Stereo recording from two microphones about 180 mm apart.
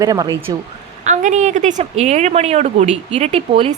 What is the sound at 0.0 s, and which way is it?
Speech, 20° right (ahead or behind).